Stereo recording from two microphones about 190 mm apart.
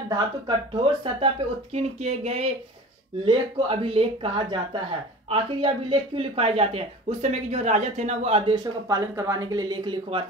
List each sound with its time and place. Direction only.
0.1 s speech: 25° right (ahead or behind)
8.5 s speech: 15° right (ahead or behind)